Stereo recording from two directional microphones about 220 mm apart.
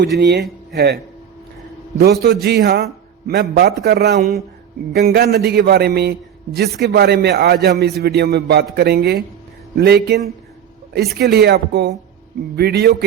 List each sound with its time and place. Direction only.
0.2 s a man's voice: 50° right (ahead or behind)
2.2 s a man's voice: 45° right (ahead or behind)